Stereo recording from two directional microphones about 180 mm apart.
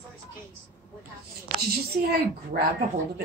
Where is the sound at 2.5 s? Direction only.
55° right (ahead or behind).